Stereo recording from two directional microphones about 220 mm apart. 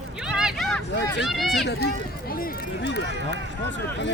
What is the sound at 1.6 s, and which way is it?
Speech, 45° left (ahead or behind).